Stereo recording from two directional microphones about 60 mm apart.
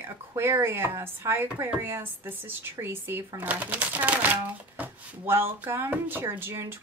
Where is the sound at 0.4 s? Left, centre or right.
Right.